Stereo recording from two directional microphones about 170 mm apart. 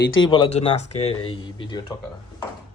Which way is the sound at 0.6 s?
40° left (ahead or behind).